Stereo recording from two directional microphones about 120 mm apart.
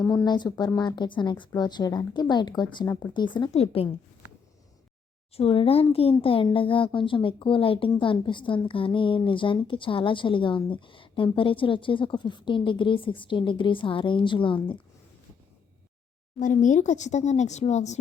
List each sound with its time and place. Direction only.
0.0 s a woman's voice: 35° left (ahead or behind)
2.8 s speech: 20° left (ahead or behind)
3.5 s a woman's voice: 55° left (ahead or behind)
5.4 s speech: 50° left (ahead or behind)
16.4 s speech: 90° left; by 17.9 s 70° left (ahead or behind)